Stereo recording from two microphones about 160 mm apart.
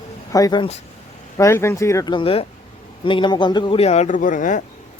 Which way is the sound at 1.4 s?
15° left (ahead or behind).